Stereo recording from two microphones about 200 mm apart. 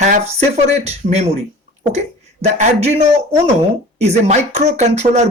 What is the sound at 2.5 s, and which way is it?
Speech, 35° right (ahead or behind).